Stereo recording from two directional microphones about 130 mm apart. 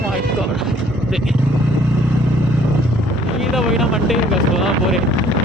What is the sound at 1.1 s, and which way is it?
Speech, centre (ahead or behind).